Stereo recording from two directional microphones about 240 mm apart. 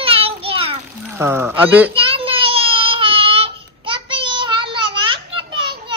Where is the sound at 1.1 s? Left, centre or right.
Centre.